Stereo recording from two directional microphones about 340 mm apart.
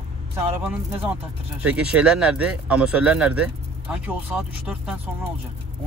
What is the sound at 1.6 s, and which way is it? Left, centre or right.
Speech, centre.